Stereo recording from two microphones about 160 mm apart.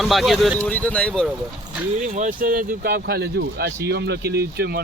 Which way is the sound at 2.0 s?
50° right (ahead or behind).